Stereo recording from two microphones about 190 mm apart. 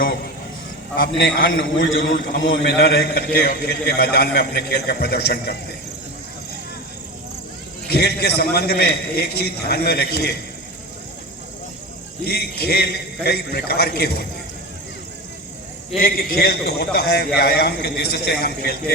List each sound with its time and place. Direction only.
0.9 s a man's voice: 70° left (ahead or behind)
7.9 s a man's voice: 55° left (ahead or behind)
12.2 s a man's voice: 55° left (ahead or behind)
16.0 s a man's voice: 50° left (ahead or behind)